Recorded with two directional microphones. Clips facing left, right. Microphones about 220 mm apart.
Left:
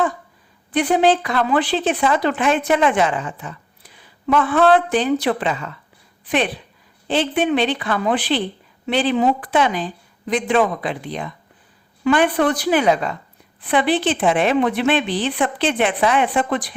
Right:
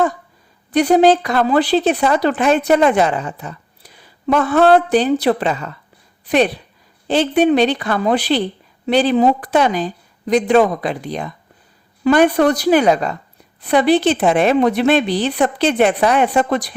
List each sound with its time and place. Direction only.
0.7 s a woman's voice: 40° right (ahead or behind)